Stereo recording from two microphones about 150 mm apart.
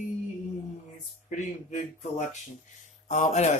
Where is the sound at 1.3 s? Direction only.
55° left (ahead or behind).